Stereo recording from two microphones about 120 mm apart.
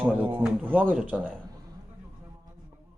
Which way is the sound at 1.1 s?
5° left (ahead or behind).